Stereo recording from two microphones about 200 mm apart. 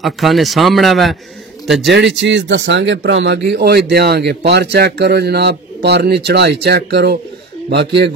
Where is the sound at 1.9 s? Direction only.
65° right (ahead or behind).